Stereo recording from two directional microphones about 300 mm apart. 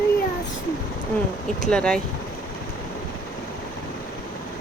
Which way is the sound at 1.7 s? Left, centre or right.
Centre.